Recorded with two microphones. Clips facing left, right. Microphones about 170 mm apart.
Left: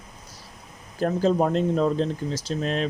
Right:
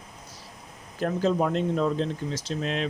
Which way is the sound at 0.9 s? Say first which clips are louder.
Left 3 dB; 40° left (ahead or behind).